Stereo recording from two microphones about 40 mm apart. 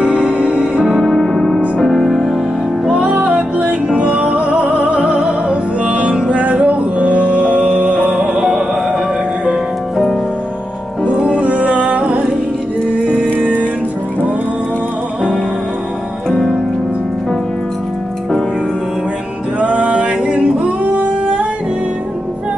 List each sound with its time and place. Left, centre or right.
0.0 s music: right
0.7 s music: centre
1.0 s music: centre
2.9 s music: right
8.4 s music: centre
11.1 s music: right
13.4 s music: right
19.6 s music: right
20.8 s singing: right